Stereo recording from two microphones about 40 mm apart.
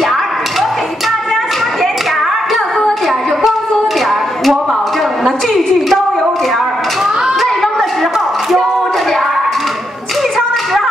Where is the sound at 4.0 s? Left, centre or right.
Centre.